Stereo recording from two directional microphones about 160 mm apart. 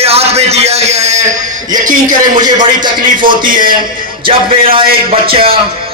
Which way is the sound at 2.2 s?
25° right (ahead or behind).